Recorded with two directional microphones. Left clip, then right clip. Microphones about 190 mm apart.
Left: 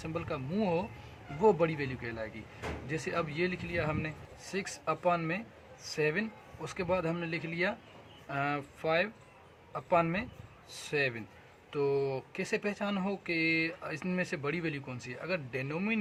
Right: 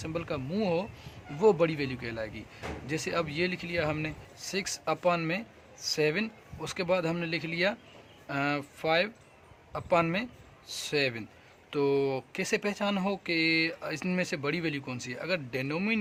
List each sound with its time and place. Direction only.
0.0 s speech: 25° right (ahead or behind)